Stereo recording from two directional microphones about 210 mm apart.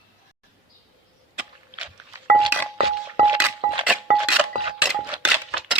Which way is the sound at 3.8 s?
5° right (ahead or behind).